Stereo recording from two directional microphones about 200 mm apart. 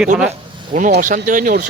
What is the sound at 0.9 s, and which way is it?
Speech, 40° right (ahead or behind).